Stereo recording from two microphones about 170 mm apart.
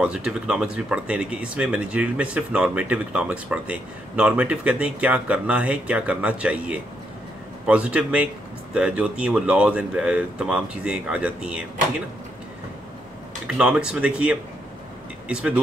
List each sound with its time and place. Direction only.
0.0 s speech: 5° right (ahead or behind)
13.5 s speech: 5° right (ahead or behind)